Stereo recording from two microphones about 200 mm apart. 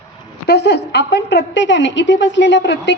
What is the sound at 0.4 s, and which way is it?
A woman's voice, 55° left (ahead or behind).